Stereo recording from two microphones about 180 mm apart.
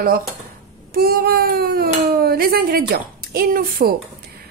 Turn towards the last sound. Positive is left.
turn(degrees=-55)  # may be behind; listen again after turning